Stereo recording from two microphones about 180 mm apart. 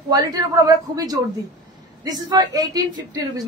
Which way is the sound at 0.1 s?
20° right (ahead or behind).